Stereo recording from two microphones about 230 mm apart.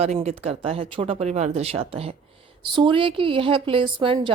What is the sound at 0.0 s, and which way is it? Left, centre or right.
Speech, right.